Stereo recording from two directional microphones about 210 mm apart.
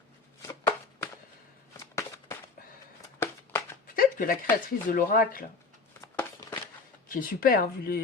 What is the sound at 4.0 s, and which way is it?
Speech, 40° left (ahead or behind).